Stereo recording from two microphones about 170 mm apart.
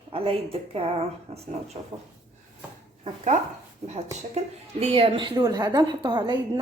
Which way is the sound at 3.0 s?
45° right (ahead or behind).